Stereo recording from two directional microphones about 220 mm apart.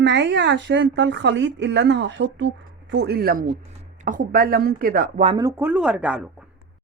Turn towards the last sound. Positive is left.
turn(degrees=-5)  # may be behind; listen again after turning